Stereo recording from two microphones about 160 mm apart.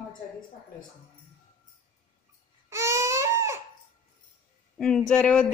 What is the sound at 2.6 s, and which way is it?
Crying, 15° right (ahead or behind).